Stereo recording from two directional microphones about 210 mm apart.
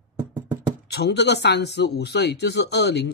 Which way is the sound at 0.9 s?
55° left (ahead or behind).